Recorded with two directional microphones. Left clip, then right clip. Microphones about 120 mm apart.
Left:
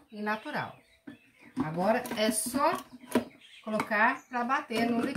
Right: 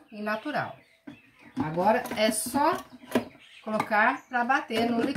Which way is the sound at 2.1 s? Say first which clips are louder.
Right 4 dB; 25° left (ahead or behind).